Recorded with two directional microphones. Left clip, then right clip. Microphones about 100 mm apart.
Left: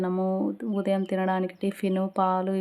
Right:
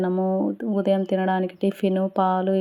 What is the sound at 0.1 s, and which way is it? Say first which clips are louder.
Speech: right 4 dB; 15° right (ahead or behind).